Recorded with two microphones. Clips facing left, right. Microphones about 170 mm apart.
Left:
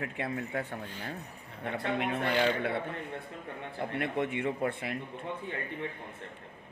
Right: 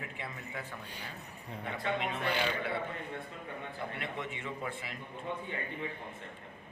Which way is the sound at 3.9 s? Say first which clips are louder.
Left 8 dB; 60° left (ahead or behind).